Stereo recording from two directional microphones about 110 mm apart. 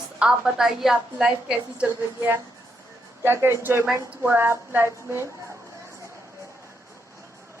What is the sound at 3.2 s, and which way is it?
A woman's voice, 20° right (ahead or behind).